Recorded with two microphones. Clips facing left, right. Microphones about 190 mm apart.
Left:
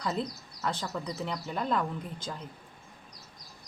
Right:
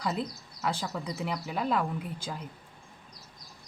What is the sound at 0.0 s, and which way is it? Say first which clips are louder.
Speech: even; 5° right (ahead or behind).